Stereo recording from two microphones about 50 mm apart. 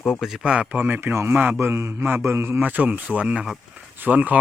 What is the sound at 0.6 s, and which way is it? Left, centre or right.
Speech, right.